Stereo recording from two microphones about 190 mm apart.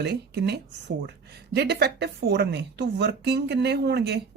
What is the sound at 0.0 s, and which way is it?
Speech, 60° right (ahead or behind).